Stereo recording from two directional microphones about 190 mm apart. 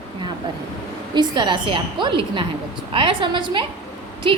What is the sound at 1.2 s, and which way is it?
Speech, 25° right (ahead or behind).